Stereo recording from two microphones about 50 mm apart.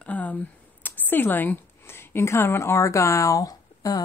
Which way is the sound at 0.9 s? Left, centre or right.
Left.